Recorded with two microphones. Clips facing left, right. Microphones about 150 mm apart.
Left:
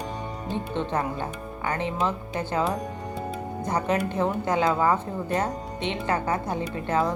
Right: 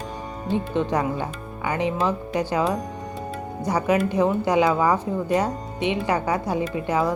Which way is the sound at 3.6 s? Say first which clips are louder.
Right 4 dB; 10° right (ahead or behind).